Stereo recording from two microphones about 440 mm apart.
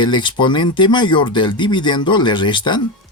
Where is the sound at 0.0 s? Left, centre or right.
Centre.